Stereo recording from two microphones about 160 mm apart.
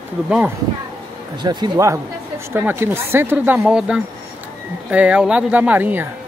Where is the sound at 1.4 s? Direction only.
25° right (ahead or behind).